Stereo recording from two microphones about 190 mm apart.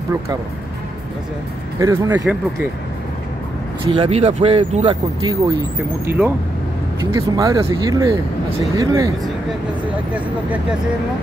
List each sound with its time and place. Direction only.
1.8 s speech: 15° right (ahead or behind)
3.8 s speech: 25° right (ahead or behind)
6.0 s speech: 10° right (ahead or behind)